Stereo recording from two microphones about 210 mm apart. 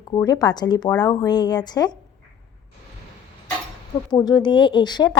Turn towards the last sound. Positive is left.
turn(degrees=20)  # may be behind; listen again after turning